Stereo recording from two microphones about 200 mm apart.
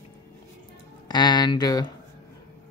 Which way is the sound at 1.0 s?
20° left (ahead or behind).